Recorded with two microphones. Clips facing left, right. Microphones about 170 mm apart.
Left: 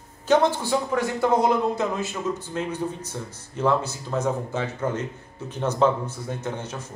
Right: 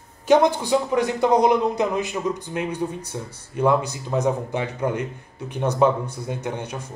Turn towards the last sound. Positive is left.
turn(degrees=-15)  # may be behind; listen again after turning